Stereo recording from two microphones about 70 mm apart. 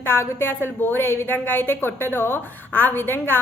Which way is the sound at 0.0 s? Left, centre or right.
Left.